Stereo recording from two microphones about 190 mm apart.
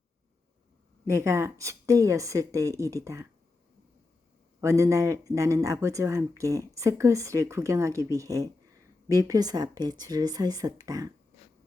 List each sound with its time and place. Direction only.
1.0 s speech: 15° right (ahead or behind)
4.6 s speech: 15° right (ahead or behind)